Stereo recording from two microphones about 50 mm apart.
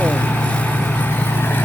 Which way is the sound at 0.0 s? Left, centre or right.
Left.